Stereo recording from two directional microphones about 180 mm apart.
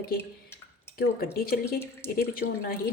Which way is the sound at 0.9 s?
60° left (ahead or behind).